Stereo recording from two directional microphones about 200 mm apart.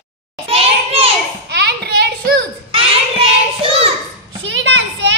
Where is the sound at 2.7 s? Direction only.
30° right (ahead or behind).